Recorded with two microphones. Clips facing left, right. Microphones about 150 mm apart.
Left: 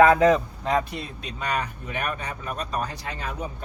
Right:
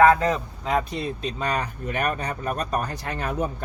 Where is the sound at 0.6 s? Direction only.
5° right (ahead or behind).